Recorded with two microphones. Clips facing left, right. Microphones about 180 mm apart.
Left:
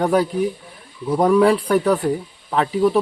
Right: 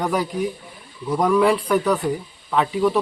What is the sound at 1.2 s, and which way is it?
Speech, 30° left (ahead or behind).